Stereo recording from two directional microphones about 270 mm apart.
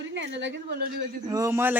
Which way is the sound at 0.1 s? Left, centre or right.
Right.